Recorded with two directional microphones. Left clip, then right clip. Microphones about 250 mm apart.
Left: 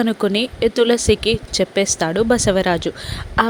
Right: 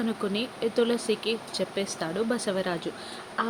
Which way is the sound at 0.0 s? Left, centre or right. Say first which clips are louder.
Left 11 dB; left.